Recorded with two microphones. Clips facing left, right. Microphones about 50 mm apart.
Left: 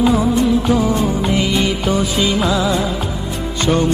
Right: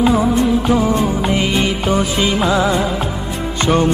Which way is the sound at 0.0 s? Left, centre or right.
Centre.